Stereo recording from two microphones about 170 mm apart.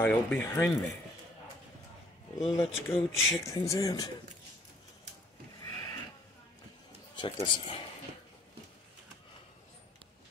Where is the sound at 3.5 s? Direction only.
20° left (ahead or behind).